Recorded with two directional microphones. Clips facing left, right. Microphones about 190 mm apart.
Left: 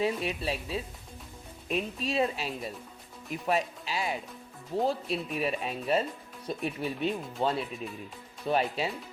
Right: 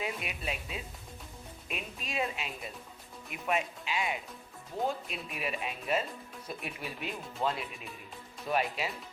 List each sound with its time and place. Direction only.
0.0 s speech: 30° left (ahead or behind)
3.3 s music: 35° left (ahead or behind)
4.9 s speech: 35° left (ahead or behind)